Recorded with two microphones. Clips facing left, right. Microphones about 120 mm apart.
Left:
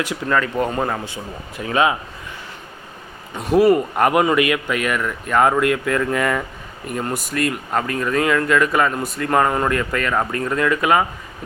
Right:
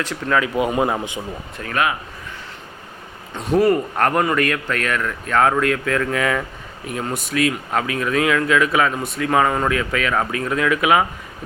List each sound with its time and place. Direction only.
0.3 s speech: 5° right (ahead or behind)
1.6 s speech: 20° left (ahead or behind)
3.3 s speech: 5° left (ahead or behind)